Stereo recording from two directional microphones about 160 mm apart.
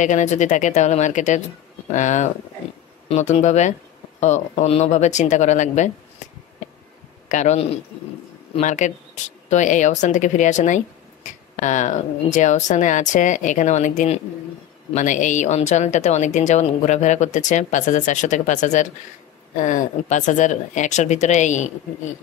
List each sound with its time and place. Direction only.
0.0 s a woman's voice: 50° left (ahead or behind)
7.2 s a woman's voice: 50° left (ahead or behind)